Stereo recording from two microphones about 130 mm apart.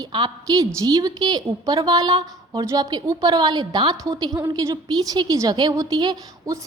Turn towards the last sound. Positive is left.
turn(degrees=-30)  # may be behind; listen again after turning